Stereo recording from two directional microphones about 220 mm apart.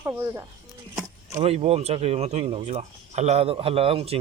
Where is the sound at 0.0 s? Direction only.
10° right (ahead or behind).